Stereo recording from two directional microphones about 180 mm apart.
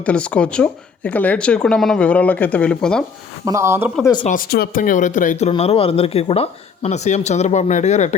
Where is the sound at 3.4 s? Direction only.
15° right (ahead or behind).